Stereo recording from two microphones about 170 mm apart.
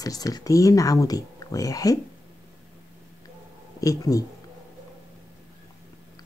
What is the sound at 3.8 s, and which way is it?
Speech, 20° left (ahead or behind).